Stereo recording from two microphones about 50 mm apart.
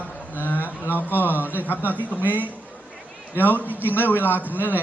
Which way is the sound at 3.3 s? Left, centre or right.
Left.